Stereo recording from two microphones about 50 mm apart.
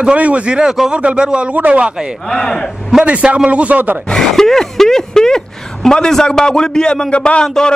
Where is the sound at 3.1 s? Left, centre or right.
Right.